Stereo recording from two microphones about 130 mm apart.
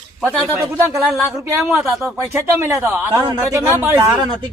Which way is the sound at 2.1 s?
20° right (ahead or behind).